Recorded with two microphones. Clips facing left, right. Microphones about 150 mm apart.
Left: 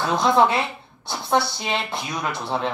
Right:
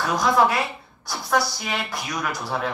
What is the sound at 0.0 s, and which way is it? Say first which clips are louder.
Speech: left 2 dB; 25° left (ahead or behind).